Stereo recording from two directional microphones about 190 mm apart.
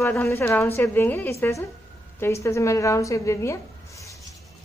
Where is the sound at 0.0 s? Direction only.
10° left (ahead or behind).